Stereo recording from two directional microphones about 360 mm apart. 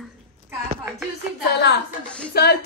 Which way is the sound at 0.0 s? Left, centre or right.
Centre.